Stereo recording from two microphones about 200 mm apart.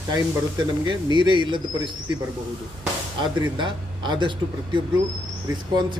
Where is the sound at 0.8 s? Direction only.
25° right (ahead or behind).